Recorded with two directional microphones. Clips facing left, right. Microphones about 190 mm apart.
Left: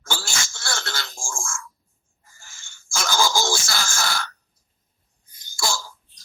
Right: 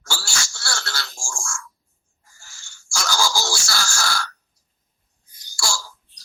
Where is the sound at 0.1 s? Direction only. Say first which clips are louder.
Left 1 dB; 20° left (ahead or behind).